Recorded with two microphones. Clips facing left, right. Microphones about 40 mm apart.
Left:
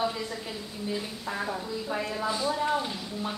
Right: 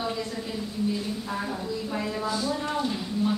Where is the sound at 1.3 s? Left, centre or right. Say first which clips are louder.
Left 2 dB; centre.